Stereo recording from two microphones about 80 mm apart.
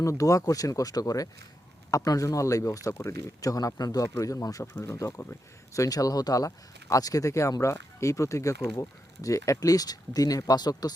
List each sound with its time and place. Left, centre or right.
0.0 s speech: left
4.7 s speech: left